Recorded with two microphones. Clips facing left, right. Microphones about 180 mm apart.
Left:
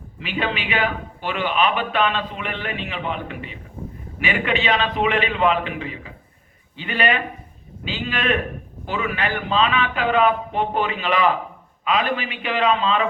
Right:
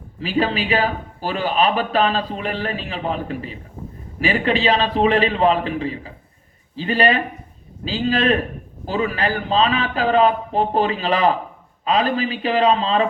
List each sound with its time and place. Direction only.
0.2 s a man's voice: 35° right (ahead or behind)